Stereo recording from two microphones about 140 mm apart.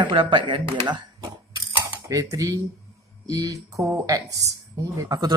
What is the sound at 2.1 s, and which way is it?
A woman's voice, 20° right (ahead or behind).